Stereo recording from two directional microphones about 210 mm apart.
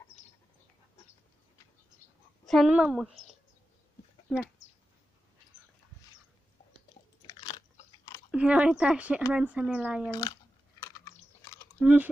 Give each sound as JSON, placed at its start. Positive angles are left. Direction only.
{"t": 2.4, "sound": "speech", "side_deg": 0}
{"t": 4.3, "sound": "speech", "side_deg": 0}
{"t": 7.2, "sound": "biting", "side_deg": 20}
{"t": 8.3, "sound": "speech", "side_deg": -5}
{"t": 11.4, "sound": "chewing", "side_deg": 15}
{"t": 11.8, "sound": "speech", "side_deg": -10}